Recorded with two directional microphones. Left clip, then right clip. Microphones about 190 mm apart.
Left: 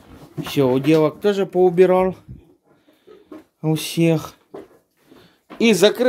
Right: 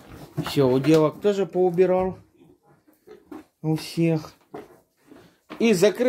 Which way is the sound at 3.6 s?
40° left (ahead or behind).